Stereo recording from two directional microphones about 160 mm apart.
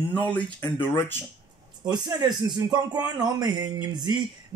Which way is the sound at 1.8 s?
25° right (ahead or behind).